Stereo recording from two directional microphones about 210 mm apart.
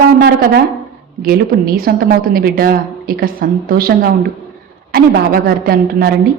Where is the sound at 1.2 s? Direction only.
45° right (ahead or behind).